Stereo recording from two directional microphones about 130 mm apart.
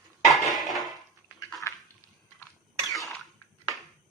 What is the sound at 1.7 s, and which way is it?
Bathtub, 20° left (ahead or behind).